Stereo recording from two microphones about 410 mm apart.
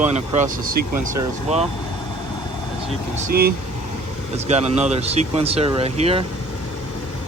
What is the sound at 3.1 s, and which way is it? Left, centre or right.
Speech, right.